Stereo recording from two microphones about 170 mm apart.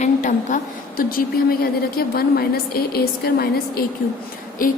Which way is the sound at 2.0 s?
65° left (ahead or behind).